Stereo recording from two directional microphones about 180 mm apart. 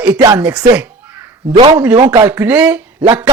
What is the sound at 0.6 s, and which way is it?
Caw, 15° right (ahead or behind).